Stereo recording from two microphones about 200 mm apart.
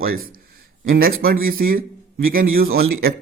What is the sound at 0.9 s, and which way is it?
Speech, 45° right (ahead or behind).